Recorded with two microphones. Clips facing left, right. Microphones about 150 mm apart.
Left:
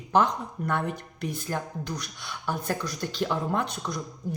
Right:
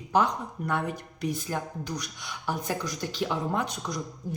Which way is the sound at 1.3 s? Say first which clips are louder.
Left 1 dB; 10° right (ahead or behind).